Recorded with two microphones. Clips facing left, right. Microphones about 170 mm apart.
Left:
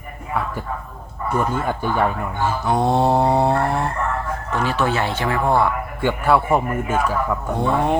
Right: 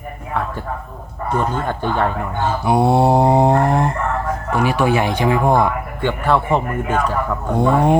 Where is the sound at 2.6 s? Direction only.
10° right (ahead or behind).